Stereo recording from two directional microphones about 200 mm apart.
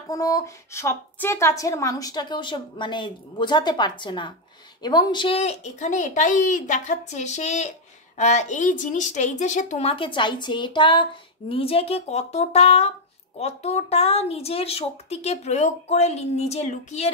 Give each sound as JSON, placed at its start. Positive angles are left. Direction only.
{"t": 0.1, "sound": "a woman's voice", "side_deg": 15}